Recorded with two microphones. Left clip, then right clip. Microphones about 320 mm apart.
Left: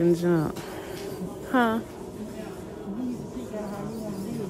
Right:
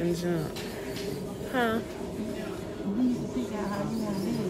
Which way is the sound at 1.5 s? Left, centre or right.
Left.